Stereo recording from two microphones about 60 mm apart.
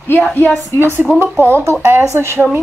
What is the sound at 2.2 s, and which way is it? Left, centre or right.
Speech, right.